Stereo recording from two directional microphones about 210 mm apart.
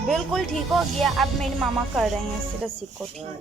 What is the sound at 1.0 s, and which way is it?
Music, centre (ahead or behind).